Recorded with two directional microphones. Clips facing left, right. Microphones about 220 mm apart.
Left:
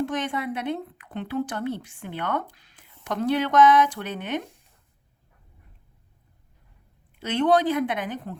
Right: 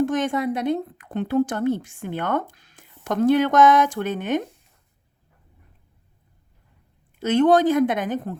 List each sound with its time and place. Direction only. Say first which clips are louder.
0.0 s a woman's voice: right 6 dB; 45° right (ahead or behind)
7.2 s a woman's voice: right 5 dB; 45° right (ahead or behind)